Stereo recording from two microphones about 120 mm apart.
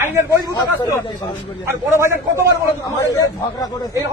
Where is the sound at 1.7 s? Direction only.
20° right (ahead or behind).